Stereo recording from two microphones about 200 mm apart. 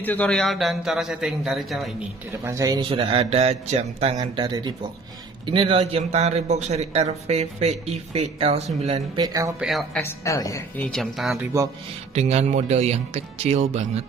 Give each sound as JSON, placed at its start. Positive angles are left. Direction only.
{"t": 0.0, "sound": "a man's voice", "side_deg": 10}
{"t": 2.3, "sound": "a man's voice", "side_deg": -15}
{"t": 9.2, "sound": "speech", "side_deg": -15}
{"t": 9.6, "sound": "a man's voice", "side_deg": 0}
{"t": 10.2, "sound": "a woman's voice", "side_deg": 15}
{"t": 10.9, "sound": "a man's voice", "side_deg": 0}
{"t": 11.5, "sound": "speech", "side_deg": -15}
{"t": 12.1, "sound": "a man's voice", "side_deg": -35}